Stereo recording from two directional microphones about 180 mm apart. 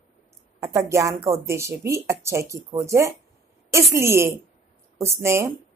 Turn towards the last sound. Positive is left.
turn(degrees=-15)  # may be behind; listen again after turning